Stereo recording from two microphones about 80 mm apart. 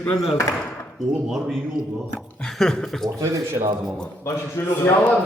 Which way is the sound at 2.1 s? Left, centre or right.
Centre.